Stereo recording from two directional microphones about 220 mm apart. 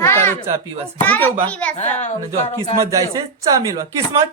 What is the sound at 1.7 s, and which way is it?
Speech, 30° left (ahead or behind).